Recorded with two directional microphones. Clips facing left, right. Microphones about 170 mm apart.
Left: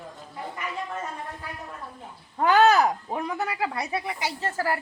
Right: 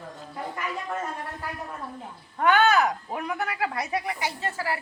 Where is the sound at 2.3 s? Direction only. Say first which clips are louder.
Left 2 dB; 30° left (ahead or behind).